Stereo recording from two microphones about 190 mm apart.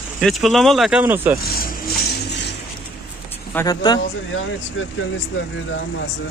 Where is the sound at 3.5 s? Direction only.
20° left (ahead or behind).